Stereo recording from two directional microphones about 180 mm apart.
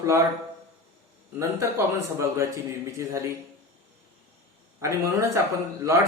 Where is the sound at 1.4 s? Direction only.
15° right (ahead or behind).